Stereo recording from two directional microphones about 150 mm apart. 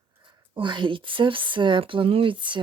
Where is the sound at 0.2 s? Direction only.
35° right (ahead or behind).